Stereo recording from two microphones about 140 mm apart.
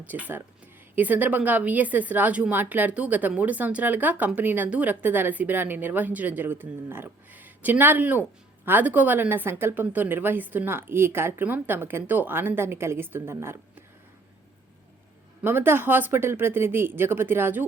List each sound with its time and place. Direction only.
0.0 s a woman's voice: 10° right (ahead or behind)
15.4 s a woman's voice: 15° right (ahead or behind)